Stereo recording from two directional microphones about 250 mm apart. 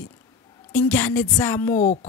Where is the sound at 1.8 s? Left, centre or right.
Left.